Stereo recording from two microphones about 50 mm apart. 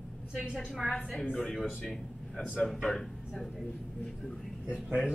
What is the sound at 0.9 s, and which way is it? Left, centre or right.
Speech, centre.